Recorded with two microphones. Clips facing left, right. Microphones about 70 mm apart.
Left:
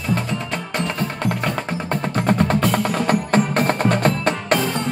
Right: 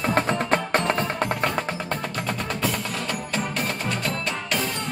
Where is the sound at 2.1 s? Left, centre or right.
Left.